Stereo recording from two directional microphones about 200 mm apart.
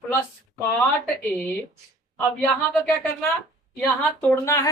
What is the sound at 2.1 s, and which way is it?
Speech, centre (ahead or behind).